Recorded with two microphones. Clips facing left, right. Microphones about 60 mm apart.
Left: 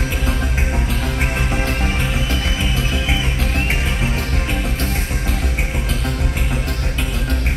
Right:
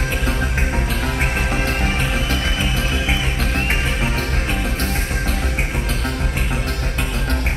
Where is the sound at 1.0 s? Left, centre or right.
Centre.